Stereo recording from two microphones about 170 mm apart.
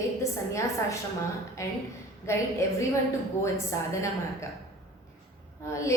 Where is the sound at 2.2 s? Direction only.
15° left (ahead or behind).